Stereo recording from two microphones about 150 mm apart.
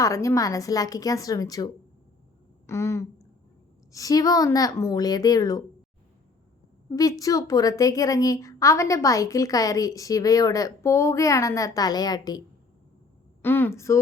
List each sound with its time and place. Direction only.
0.0 s a woman's voice: 20° left (ahead or behind)
6.9 s a woman's voice: 25° left (ahead or behind)
13.4 s a woman's voice: 15° left (ahead or behind)